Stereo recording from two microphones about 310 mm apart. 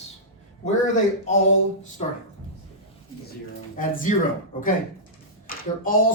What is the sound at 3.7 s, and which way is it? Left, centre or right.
Speech, left.